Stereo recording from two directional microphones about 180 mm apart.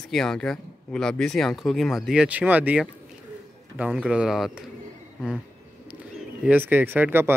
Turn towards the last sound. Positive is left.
turn(degrees=-10)  # may be behind; listen again after turning